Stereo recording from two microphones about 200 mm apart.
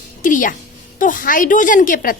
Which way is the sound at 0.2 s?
40° left (ahead or behind).